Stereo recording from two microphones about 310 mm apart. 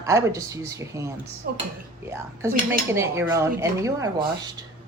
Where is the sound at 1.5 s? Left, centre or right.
Right.